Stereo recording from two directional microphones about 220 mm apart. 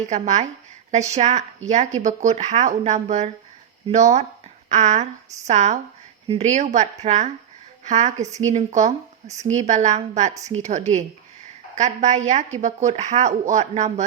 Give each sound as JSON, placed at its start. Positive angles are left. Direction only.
{"t": 0.0, "sound": "speech", "side_deg": -30}